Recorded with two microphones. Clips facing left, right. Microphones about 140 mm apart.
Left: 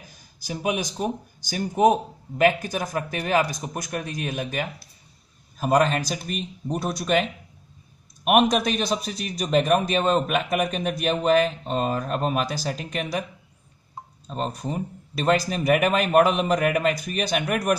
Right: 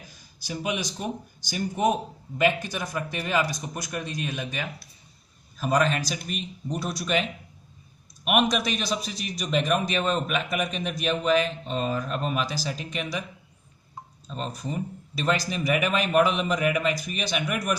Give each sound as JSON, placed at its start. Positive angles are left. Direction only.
{"t": 0.5, "sound": "a man's voice", "side_deg": 50}
{"t": 14.2, "sound": "a man's voice", "side_deg": 45}